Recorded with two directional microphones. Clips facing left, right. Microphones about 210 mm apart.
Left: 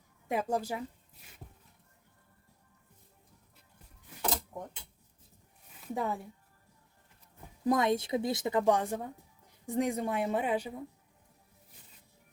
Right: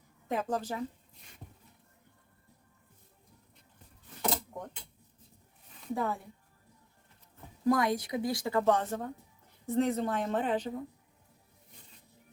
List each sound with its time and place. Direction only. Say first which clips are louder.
0.3 s a woman's voice: left 1 dB; 10° left (ahead or behind)
5.9 s a woman's voice: right 1 dB; 20° left (ahead or behind)
7.6 s a woman's voice: even; 20° left (ahead or behind)